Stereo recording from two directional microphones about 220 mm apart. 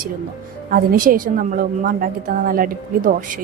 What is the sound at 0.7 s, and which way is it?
A woman's voice, 40° right (ahead or behind).